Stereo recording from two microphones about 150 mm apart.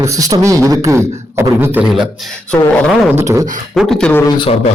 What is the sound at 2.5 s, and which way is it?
Speech, centre (ahead or behind).